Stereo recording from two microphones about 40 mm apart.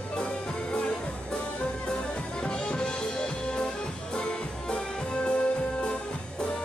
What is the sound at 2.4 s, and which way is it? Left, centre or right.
Music, left.